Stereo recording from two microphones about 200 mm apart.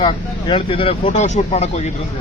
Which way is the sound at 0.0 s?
25° left (ahead or behind).